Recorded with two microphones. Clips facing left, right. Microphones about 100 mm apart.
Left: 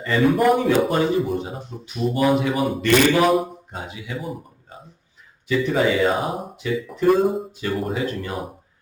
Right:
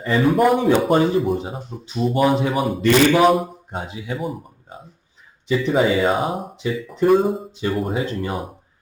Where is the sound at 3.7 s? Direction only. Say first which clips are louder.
Right 4 dB; 30° right (ahead or behind).